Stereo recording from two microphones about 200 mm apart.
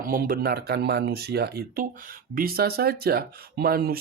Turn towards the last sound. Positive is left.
turn(degrees=-50)  # may be behind; listen again after turning